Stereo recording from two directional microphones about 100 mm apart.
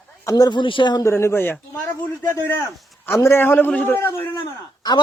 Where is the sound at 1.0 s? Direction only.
25° left (ahead or behind).